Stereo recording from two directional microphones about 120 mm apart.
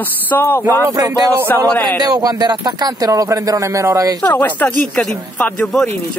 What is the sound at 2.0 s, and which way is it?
Speech, 35° right (ahead or behind).